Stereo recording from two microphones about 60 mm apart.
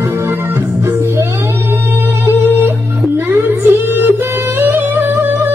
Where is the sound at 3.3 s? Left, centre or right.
Right.